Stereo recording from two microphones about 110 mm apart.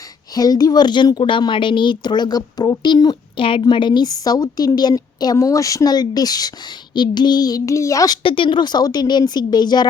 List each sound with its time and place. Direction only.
0.3 s a woman's voice: 35° left (ahead or behind)
8.2 s a woman's voice: 50° left (ahead or behind)